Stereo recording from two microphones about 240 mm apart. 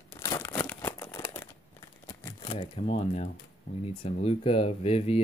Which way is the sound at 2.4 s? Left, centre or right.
Left.